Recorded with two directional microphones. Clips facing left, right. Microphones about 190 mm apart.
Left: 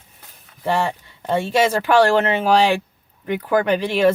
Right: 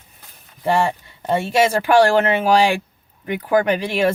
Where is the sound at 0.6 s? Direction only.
10° right (ahead or behind).